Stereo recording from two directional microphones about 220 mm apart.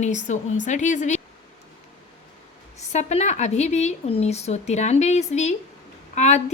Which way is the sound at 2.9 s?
30° left (ahead or behind).